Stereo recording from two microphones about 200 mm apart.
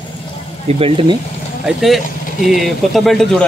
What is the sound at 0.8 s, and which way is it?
Speech, 25° right (ahead or behind).